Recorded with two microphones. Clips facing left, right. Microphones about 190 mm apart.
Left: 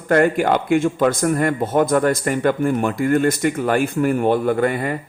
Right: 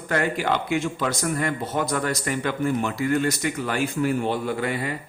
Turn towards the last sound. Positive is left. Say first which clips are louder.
# left 7 dB
turn(degrees=50)  # may be behind; listen again after turning